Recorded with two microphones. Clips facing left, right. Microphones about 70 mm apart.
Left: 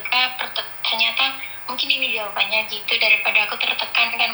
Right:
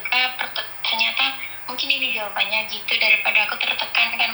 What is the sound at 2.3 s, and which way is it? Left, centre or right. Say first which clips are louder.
Speech: left 1 dB; left.